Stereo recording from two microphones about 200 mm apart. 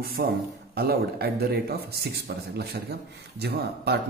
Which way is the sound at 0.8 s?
50° right (ahead or behind).